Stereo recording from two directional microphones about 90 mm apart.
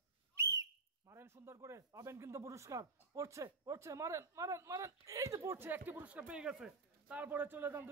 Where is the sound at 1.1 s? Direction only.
35° right (ahead or behind).